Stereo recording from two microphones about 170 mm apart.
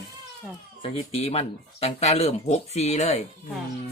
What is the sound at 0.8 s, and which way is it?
Speech, 35° left (ahead or behind).